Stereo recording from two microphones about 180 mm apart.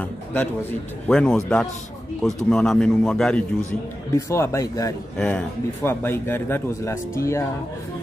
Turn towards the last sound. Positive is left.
turn(degrees=15)  # may be behind; listen again after turning